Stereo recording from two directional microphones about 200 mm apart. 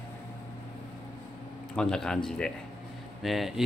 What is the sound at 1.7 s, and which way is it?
A man's voice, 5° left (ahead or behind).